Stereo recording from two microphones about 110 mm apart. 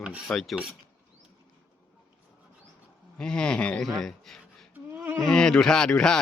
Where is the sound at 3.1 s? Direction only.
5° left (ahead or behind).